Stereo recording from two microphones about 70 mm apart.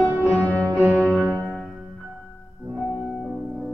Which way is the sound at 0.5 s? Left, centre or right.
Right.